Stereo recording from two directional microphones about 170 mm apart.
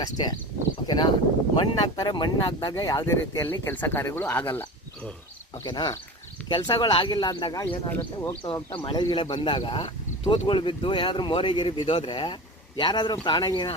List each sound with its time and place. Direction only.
0.0 s speech: 25° left (ahead or behind)
5.6 s speech: 25° left (ahead or behind)
7.9 s speech: 10° left (ahead or behind)
8.4 s speech: 30° left (ahead or behind)